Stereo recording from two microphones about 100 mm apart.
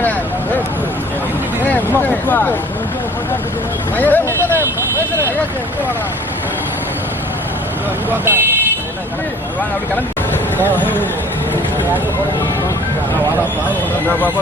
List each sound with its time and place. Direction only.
1.6 s speech: 20° left (ahead or behind)
3.9 s speech: 20° left (ahead or behind)
4.3 s vehicle: 25° right (ahead or behind)
8.2 s speech: 20° right (ahead or behind)